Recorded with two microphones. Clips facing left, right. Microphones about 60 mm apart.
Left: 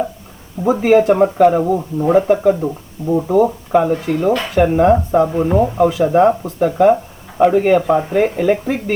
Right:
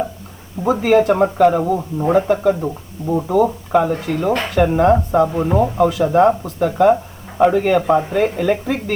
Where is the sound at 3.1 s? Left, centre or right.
Centre.